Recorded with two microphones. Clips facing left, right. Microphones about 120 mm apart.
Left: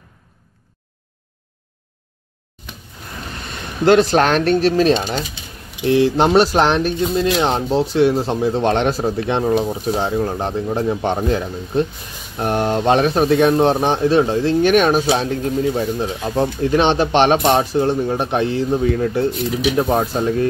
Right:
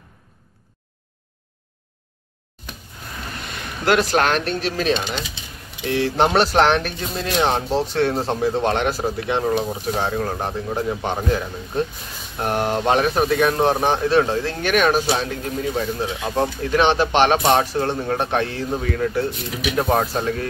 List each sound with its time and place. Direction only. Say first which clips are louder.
3.8 s speech: left 5 dB; 30° left (ahead or behind); by 5.4 s 45° left (ahead or behind)
5.9 s speech: left 5 dB; 15° left (ahead or behind)
19.9 s speech: left 2 dB; 15° left (ahead or behind)